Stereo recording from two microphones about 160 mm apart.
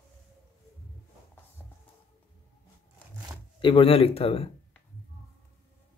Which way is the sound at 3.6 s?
30° left (ahead or behind).